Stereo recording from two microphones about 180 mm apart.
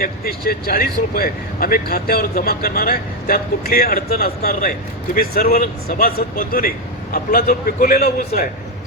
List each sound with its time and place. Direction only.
0.0 s speech: 55° left (ahead or behind)